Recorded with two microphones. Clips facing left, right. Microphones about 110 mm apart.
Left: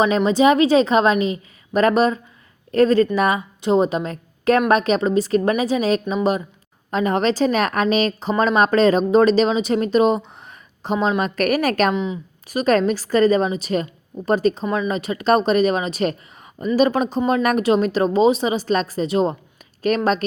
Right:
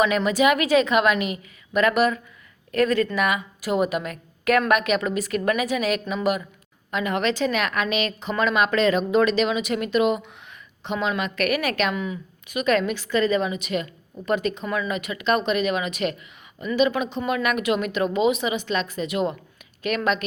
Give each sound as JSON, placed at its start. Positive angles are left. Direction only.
{"t": 0.0, "sound": "a woman's voice", "side_deg": 30}
{"t": 11.9, "sound": "a woman's voice", "side_deg": 20}
{"t": 12.5, "sound": "speech", "side_deg": 35}